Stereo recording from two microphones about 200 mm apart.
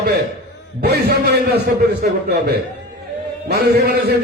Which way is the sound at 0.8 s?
55° right (ahead or behind).